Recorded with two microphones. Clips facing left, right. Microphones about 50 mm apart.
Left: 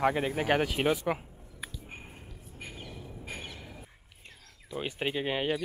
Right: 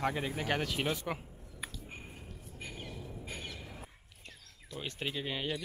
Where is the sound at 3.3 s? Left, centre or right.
Centre.